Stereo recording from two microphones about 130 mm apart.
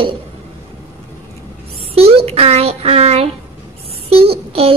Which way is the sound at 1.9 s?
50° right (ahead or behind).